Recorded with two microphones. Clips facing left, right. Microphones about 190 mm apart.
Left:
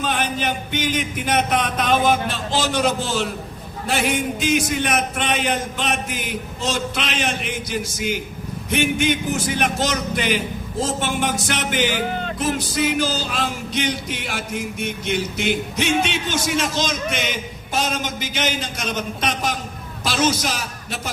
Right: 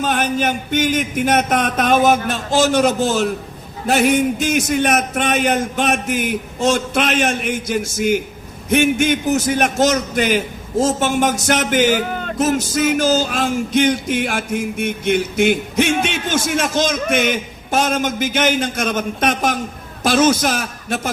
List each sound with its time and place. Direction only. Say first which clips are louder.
0.0 s a man's voice: right 5 dB; 45° right (ahead or behind)